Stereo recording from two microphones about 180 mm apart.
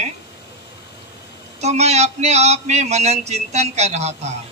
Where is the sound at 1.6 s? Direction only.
35° right (ahead or behind).